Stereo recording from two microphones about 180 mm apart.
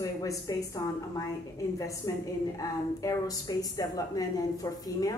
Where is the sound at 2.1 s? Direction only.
20° left (ahead or behind).